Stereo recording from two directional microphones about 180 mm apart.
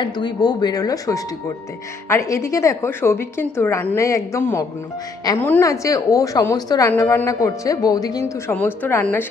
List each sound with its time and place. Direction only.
0.0 s a woman's voice: 25° left (ahead or behind)